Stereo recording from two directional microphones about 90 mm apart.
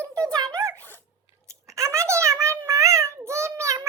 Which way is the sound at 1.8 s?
30° right (ahead or behind).